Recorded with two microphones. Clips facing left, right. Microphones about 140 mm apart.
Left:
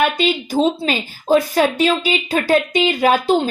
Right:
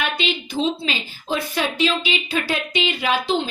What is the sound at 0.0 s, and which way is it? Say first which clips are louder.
A woman's voice: left 7 dB; 45° left (ahead or behind).